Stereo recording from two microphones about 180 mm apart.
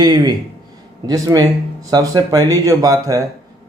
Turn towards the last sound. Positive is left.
turn(degrees=-20)  # may be behind; listen again after turning